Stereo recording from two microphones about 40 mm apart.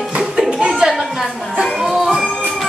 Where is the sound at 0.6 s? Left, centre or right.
Centre.